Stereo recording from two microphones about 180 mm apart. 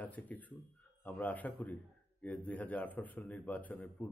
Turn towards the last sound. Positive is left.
turn(degrees=10)  # may be behind; listen again after turning